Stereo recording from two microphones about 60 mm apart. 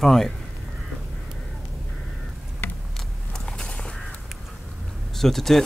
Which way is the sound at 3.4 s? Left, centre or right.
Centre.